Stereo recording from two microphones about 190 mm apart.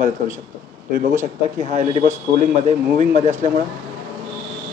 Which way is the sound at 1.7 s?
40° right (ahead or behind).